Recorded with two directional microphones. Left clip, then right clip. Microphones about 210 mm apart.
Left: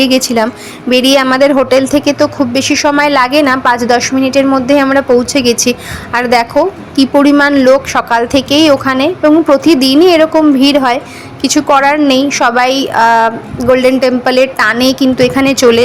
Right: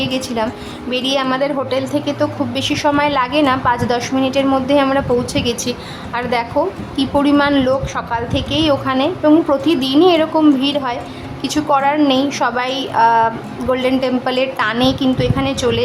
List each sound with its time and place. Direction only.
0.0 s a woman's voice: 25° left (ahead or behind)